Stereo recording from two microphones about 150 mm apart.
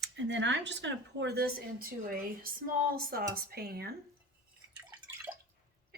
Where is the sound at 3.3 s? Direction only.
90° right.